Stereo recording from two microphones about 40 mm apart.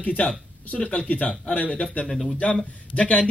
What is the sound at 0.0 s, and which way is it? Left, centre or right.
Speech, left.